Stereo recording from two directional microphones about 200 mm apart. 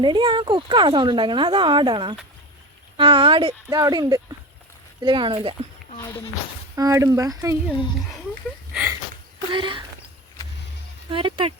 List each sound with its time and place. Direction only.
0.0 s speech: 25° right (ahead or behind)
6.7 s speech: 15° right (ahead or behind)
7.7 s a child's voice: 5° right (ahead or behind)
8.7 s a sound: 10° right (ahead or behind)
9.5 s speech: 25° right (ahead or behind)
11.1 s speech: 25° right (ahead or behind)